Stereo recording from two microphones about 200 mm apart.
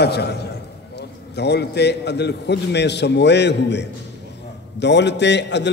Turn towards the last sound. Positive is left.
turn(degrees=60)  # may be behind; listen again after turning